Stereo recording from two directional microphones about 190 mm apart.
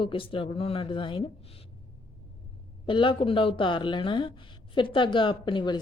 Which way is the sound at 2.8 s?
25° left (ahead or behind).